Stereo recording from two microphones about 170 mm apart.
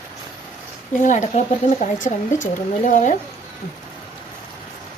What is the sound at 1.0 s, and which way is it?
Speech, 45° left (ahead or behind).